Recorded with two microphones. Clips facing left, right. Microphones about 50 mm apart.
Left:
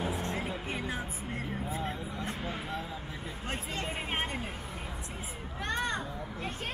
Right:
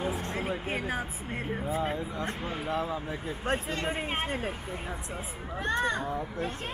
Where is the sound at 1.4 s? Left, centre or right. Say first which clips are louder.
Right 6 dB; centre.